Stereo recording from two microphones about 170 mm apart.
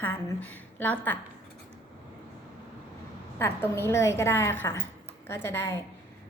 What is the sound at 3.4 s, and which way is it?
A woman's voice, 15° left (ahead or behind).